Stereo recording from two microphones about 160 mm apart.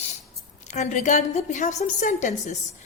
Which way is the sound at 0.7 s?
50° left (ahead or behind).